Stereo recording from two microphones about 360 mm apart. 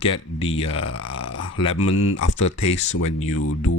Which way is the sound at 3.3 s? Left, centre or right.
Left.